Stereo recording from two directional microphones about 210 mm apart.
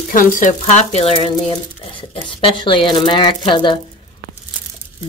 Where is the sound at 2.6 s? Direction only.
25° left (ahead or behind).